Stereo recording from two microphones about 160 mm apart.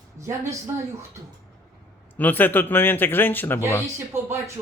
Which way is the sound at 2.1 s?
10° left (ahead or behind).